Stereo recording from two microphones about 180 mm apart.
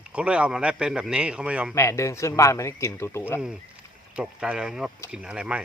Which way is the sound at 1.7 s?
15° left (ahead or behind).